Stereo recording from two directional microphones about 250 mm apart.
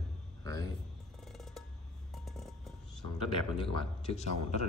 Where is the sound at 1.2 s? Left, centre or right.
Centre.